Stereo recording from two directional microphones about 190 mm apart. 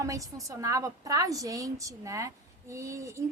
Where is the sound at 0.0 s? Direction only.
15° right (ahead or behind).